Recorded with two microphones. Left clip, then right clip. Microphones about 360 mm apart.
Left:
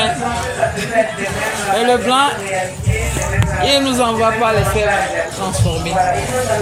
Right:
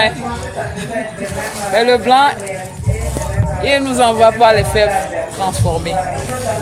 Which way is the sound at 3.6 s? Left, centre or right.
Right.